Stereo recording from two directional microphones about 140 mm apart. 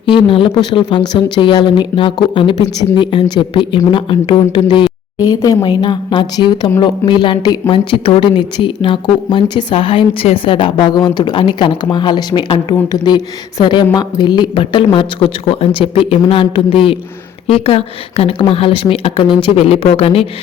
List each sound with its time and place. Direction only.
0.0 s a woman's voice: 40° left (ahead or behind)